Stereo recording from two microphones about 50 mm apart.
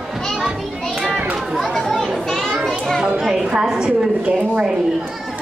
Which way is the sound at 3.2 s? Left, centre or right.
Centre.